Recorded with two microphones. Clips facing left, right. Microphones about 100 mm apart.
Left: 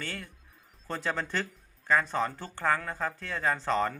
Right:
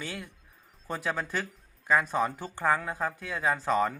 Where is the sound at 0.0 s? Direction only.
10° right (ahead or behind).